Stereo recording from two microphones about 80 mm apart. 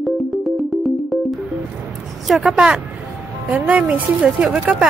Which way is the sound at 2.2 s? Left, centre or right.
Centre.